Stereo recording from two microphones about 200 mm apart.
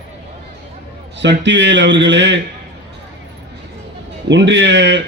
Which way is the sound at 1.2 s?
65° right (ahead or behind).